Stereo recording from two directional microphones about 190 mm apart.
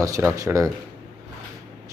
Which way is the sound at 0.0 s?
15° right (ahead or behind).